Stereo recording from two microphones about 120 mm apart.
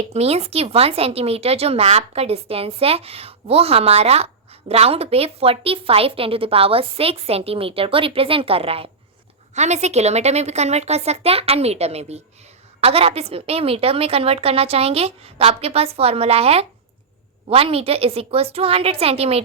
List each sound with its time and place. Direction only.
0.1 s a woman's voice: 60° right (ahead or behind)
9.6 s speech: 70° right (ahead or behind); by 19.4 s 55° right (ahead or behind)